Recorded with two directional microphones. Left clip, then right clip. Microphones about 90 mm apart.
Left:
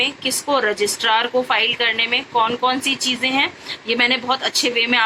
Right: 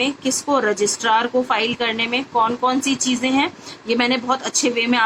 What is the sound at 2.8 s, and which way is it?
A woman's voice, 10° left (ahead or behind).